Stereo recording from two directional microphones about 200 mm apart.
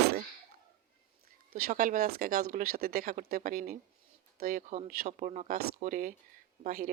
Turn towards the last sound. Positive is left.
turn(degrees=-45)  # may be behind; listen again after turning